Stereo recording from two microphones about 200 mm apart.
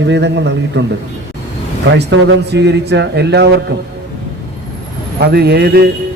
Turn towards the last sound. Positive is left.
turn(degrees=-55)  # may be behind; listen again after turning